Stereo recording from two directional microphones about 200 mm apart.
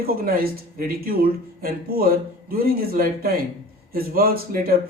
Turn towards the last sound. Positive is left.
turn(degrees=-50)  # may be behind; listen again after turning